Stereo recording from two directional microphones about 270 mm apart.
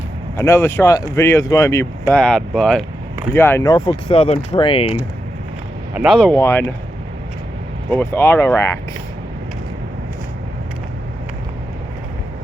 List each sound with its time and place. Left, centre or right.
0.3 s speech: centre
5.9 s speech: centre
7.9 s speech: centre